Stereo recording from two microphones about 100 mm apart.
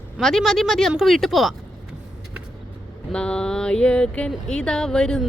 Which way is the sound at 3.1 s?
10° left (ahead or behind).